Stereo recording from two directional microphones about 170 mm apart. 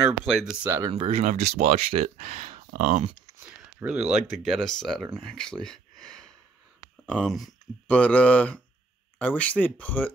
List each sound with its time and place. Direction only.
0.3 s speech: 5° right (ahead or behind)
0.8 s speech: 35° right (ahead or behind); by 3.1 s 50° right (ahead or behind)
3.4 s speech: 5° right (ahead or behind); by 10.1 s 10° left (ahead or behind)